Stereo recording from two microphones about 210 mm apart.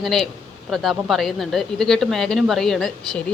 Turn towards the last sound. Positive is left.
turn(degrees=0)  # may be behind; listen again after turning